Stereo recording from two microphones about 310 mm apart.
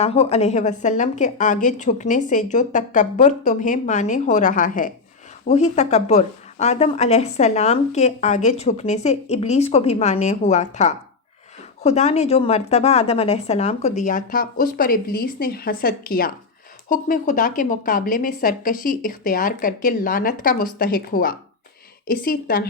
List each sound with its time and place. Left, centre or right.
0.0 s a woman's voice: centre